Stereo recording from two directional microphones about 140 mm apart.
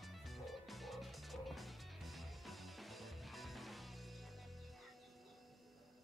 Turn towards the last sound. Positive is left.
turn(degrees=0)  # may be behind; listen again after turning